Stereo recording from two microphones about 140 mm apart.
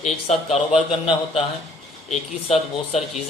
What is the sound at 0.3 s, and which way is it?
Speech, 50° left (ahead or behind).